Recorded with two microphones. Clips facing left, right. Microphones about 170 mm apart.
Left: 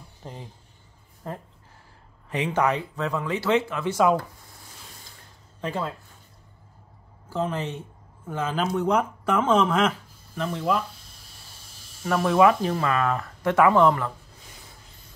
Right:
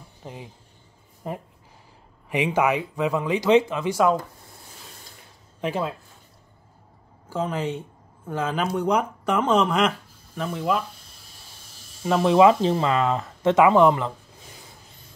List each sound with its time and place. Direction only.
0.2 s speech: 5° right (ahead or behind)
5.6 s speech: 15° right (ahead or behind)
7.3 s speech: centre (ahead or behind)
12.0 s speech: 20° right (ahead or behind)